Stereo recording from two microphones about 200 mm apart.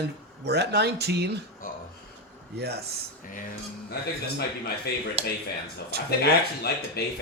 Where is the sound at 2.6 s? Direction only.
55° right (ahead or behind).